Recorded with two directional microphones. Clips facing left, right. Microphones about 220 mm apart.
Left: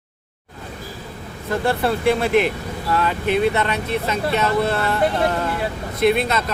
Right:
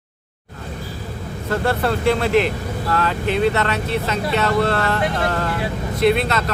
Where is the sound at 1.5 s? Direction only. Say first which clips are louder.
Even; 15° left (ahead or behind).